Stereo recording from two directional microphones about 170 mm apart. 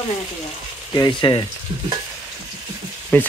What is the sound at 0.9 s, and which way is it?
Speech, 25° left (ahead or behind).